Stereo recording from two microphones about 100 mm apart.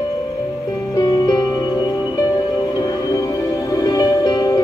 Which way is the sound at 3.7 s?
40° left (ahead or behind).